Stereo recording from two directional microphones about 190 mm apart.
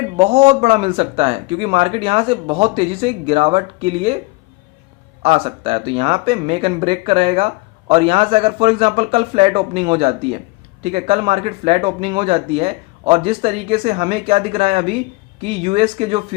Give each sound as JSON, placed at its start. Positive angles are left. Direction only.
{"t": 0.2, "sound": "speech", "side_deg": -35}
{"t": 5.2, "sound": "speech", "side_deg": -30}